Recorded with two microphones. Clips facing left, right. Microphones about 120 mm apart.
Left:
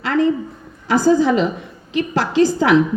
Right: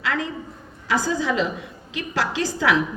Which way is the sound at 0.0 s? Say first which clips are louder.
Left 10 dB; 35° left (ahead or behind).